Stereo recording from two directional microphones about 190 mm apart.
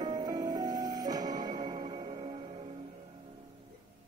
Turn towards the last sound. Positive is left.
turn(degrees=-30)  # may be behind; listen again after turning